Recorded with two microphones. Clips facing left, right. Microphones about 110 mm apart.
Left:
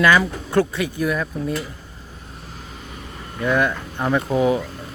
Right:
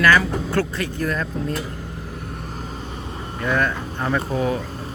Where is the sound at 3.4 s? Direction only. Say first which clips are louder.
Left 2 dB; 10° left (ahead or behind).